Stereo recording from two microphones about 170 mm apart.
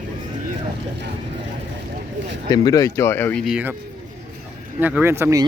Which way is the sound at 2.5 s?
20° left (ahead or behind).